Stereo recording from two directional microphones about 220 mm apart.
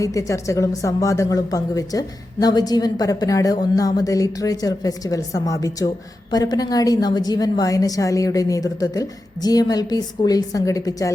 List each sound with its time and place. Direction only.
0.0 s a woman's voice: 15° left (ahead or behind)